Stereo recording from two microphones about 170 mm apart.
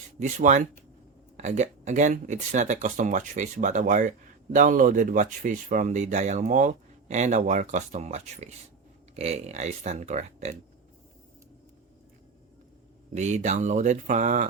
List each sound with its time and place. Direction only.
0.2 s speech: 45° right (ahead or behind)
13.1 s speech: 45° right (ahead or behind)